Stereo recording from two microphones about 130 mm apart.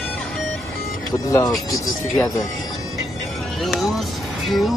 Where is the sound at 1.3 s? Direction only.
25° left (ahead or behind).